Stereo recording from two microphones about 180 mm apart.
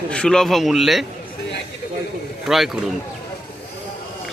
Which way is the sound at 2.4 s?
Centre (ahead or behind).